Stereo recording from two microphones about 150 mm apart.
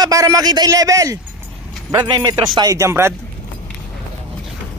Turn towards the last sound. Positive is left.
turn(degrees=-20)  # may be behind; listen again after turning